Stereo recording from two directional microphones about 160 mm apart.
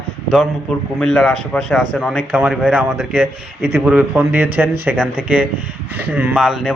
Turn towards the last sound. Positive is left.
turn(degrees=-5)  # may be behind; listen again after turning